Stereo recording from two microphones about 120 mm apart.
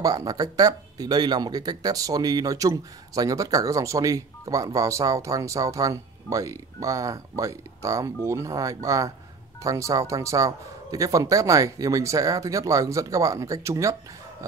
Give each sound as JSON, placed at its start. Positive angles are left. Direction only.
{"t": 0.0, "sound": "speech", "side_deg": -30}